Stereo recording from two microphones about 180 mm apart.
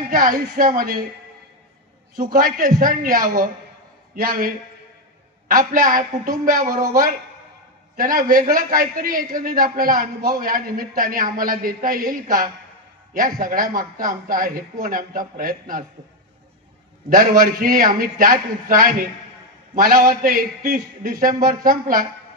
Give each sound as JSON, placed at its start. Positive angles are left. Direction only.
{"t": 0.1, "sound": "a man's voice", "side_deg": -50}
{"t": 2.3, "sound": "a man's voice", "side_deg": -50}
{"t": 7.9, "sound": "a man's voice", "side_deg": -50}
{"t": 17.4, "sound": "a man's voice", "side_deg": -50}